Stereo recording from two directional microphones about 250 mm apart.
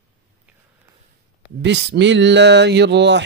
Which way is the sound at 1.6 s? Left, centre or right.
Right.